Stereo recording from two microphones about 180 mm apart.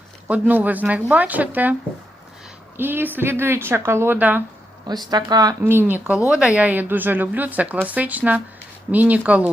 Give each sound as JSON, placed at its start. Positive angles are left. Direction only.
{"t": 0.3, "sound": "a woman's voice", "side_deg": -10}
{"t": 2.7, "sound": "a woman's voice", "side_deg": -10}
{"t": 4.9, "sound": "a woman's voice", "side_deg": -25}